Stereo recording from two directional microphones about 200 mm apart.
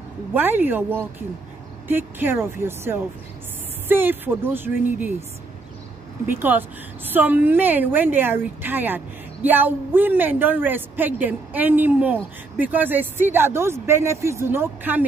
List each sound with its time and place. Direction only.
0.3 s a woman's voice: 10° right (ahead or behind)
6.2 s a woman's voice: 10° right (ahead or behind)